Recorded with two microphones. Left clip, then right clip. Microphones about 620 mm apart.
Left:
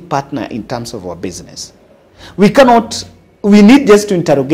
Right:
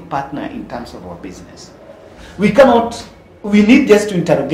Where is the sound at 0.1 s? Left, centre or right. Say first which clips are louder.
Left 4 dB; left.